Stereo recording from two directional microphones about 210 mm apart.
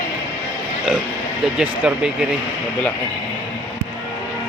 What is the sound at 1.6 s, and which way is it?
Speech, 5° right (ahead or behind).